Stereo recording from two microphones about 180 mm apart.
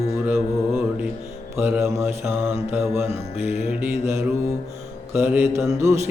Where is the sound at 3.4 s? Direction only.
35° left (ahead or behind).